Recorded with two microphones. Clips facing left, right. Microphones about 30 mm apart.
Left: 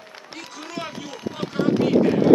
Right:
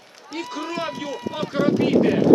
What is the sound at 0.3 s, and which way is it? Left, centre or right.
A man's voice, right.